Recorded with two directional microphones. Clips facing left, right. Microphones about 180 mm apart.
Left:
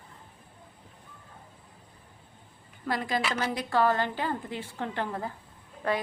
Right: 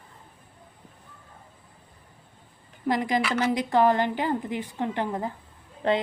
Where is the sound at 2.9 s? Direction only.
15° right (ahead or behind).